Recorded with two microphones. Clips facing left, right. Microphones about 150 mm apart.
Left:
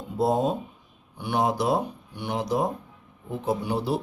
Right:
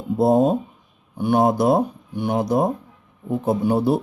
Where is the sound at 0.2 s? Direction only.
50° right (ahead or behind).